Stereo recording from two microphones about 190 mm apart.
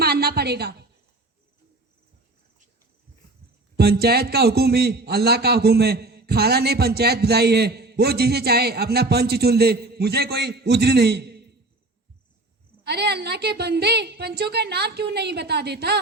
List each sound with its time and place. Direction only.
0.0 s a sound: 55° right (ahead or behind)
3.8 s a man's voice: 55° right (ahead or behind)
12.8 s a man's voice: 60° right (ahead or behind)